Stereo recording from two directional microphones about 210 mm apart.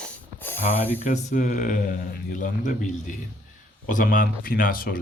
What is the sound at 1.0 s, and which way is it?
Speech, 40° left (ahead or behind).